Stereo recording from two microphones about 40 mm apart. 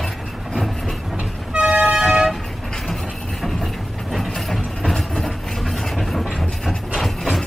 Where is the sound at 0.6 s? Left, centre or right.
Centre.